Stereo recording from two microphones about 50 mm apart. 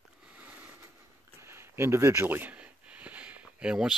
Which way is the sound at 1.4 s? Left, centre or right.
Right.